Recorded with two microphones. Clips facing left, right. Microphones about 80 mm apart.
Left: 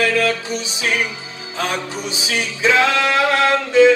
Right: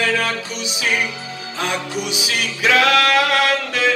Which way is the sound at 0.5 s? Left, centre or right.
Left.